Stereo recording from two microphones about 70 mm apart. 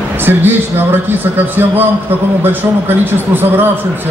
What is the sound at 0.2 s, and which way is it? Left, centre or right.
Speech, right.